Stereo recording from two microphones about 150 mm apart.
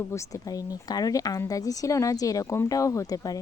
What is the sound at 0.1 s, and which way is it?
Speech, 20° left (ahead or behind).